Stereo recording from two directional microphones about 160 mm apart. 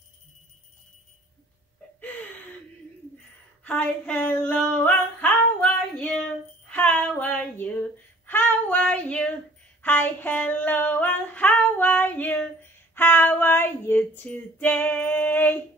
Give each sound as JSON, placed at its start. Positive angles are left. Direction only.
{"t": 2.0, "sound": "gasp", "side_deg": 10}
{"t": 3.6, "sound": "a sound", "side_deg": 10}
{"t": 6.7, "sound": "female singing", "side_deg": 10}
{"t": 8.3, "sound": "child singing", "side_deg": 10}
{"t": 12.9, "sound": "female singing", "side_deg": 10}